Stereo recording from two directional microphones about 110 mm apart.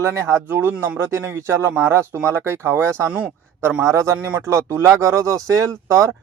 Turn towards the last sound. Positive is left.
turn(degrees=-25)  # may be behind; listen again after turning